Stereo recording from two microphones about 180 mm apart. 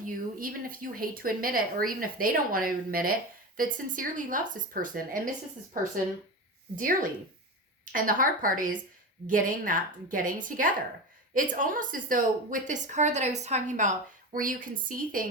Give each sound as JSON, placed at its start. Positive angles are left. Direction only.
{"t": 0.0, "sound": "speech", "side_deg": -50}
{"t": 6.7, "sound": "speech", "side_deg": -50}